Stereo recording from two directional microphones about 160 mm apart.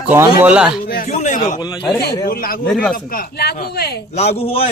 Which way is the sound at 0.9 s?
70° left (ahead or behind).